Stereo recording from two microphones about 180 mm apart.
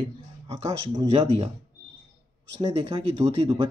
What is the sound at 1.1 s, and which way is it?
Speech, 35° right (ahead or behind).